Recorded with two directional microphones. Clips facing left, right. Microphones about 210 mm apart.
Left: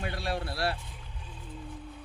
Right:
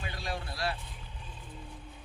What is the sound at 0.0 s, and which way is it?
Vehicle, 60° left (ahead or behind).